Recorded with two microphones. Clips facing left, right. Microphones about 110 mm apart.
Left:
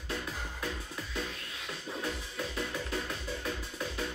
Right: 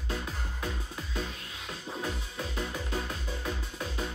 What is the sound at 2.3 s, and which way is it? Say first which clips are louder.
Music: right 1 dB; 25° right (ahead or behind).